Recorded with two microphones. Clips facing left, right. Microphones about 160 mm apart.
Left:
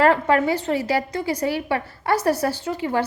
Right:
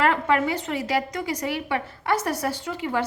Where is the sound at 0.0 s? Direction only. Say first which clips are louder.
Left 4 dB; 35° left (ahead or behind).